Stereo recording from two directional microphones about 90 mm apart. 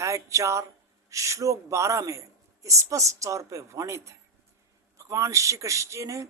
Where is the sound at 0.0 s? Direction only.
35° right (ahead or behind).